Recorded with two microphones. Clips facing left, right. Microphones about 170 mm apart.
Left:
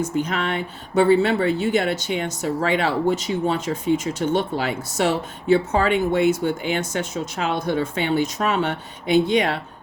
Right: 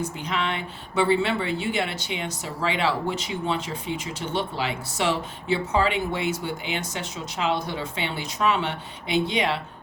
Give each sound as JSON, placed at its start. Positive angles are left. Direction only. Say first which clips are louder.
{"t": 0.0, "sound": "speech", "louder": "left 5 dB", "side_deg": 45}